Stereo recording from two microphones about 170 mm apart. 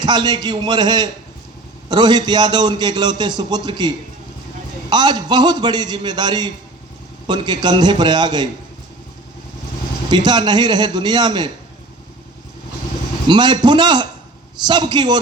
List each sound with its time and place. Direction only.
0.0 s a man's voice: 25° right (ahead or behind)
10.1 s a man's voice: 25° right (ahead or behind)
13.2 s a man's voice: 25° right (ahead or behind)